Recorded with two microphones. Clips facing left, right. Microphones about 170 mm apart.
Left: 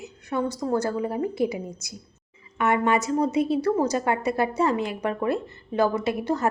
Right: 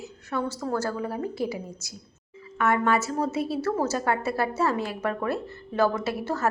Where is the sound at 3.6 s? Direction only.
15° left (ahead or behind).